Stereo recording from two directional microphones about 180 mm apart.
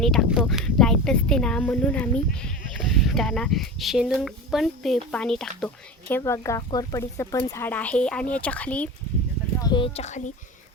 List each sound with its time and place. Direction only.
0.0 s speech: centre (ahead or behind)
9.6 s a woman's voice: 25° left (ahead or behind); by 10.3 s 40° left (ahead or behind)